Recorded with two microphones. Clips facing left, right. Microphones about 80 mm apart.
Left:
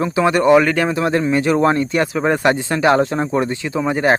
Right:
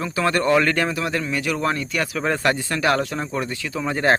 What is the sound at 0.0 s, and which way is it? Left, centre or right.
Speech, left.